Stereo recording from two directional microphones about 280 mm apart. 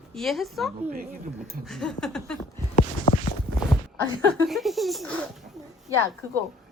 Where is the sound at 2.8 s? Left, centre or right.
Left.